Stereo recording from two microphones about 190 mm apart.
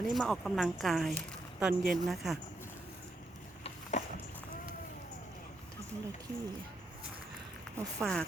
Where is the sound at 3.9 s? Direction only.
35° left (ahead or behind).